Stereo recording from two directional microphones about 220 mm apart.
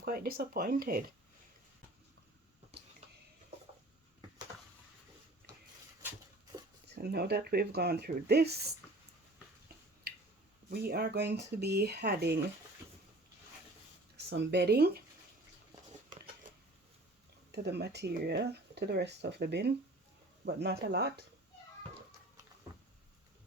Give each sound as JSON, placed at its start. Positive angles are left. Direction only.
{"t": 0.0, "sound": "speech", "side_deg": -45}
{"t": 6.8, "sound": "speech", "side_deg": -45}
{"t": 10.7, "sound": "speech", "side_deg": -45}
{"t": 14.3, "sound": "speech", "side_deg": -50}
{"t": 17.5, "sound": "speech", "side_deg": -50}